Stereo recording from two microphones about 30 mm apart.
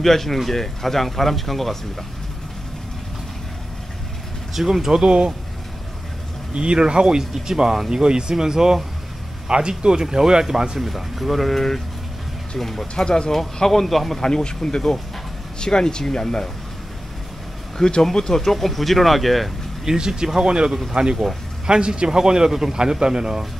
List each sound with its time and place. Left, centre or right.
0.0 s speech: centre
4.6 s speech: centre
5.0 s speech: right
6.5 s a man's voice: right
9.5 s a man's voice: right
10.8 s speech: centre
12.9 s speech: left
13.7 s speech: centre
14.2 s speech: left
17.8 s speech: centre
19.8 s speech: centre
20.4 s a man's voice: right